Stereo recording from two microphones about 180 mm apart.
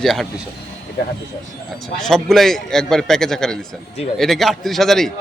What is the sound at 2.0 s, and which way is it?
A man's voice, centre (ahead or behind).